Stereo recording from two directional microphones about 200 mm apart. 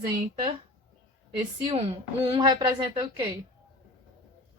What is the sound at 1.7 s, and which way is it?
A woman's voice, 30° right (ahead or behind).